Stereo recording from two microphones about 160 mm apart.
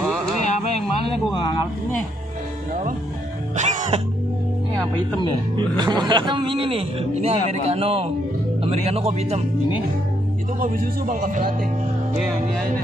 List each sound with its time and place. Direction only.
1.3 s speech: 30° left (ahead or behind)
3.5 s music: 45° right (ahead or behind)
5.8 s a man's voice: 25° right (ahead or behind)
10.6 s speech: 60° right (ahead or behind)